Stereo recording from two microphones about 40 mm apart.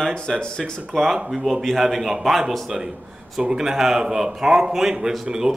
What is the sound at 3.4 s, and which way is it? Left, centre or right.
A man's voice, centre.